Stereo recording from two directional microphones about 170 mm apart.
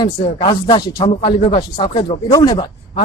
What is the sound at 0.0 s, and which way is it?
A man's voice, 25° left (ahead or behind).